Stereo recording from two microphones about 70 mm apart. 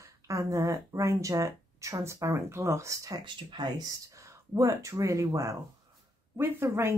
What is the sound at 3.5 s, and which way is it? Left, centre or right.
Speech, right.